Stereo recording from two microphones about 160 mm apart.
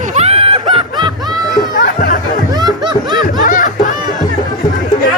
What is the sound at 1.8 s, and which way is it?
Music, 65° left (ahead or behind).